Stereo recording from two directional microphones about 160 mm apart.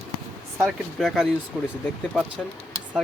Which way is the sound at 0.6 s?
Centre (ahead or behind).